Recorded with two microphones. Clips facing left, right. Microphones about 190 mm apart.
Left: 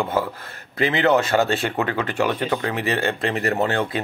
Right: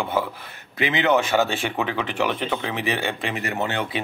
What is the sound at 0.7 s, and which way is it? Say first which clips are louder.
Speech: left 3 dB; 35° left (ahead or behind).